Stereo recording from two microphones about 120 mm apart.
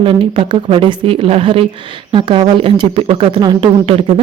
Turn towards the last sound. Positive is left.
turn(degrees=-50)  # may be behind; listen again after turning